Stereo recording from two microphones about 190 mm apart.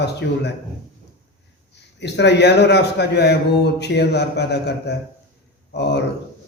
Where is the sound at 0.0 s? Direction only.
60° left (ahead or behind).